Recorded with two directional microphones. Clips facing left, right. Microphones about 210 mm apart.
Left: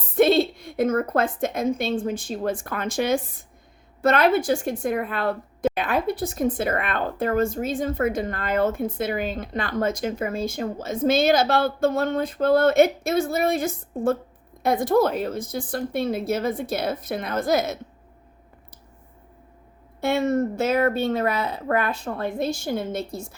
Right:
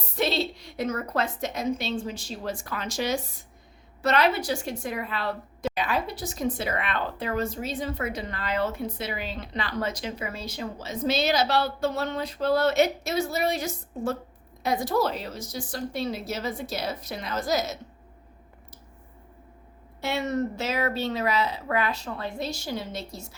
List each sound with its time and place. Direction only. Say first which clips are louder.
0.2 s a woman's voice: left 9 dB; 50° left (ahead or behind)
20.0 s a woman's voice: left 6 dB; 50° left (ahead or behind)